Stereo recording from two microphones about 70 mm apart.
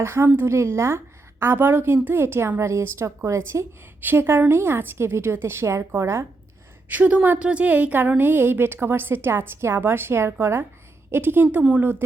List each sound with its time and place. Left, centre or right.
0.0 s a woman's voice: right
4.0 s a woman's voice: right
6.8 s a woman's voice: right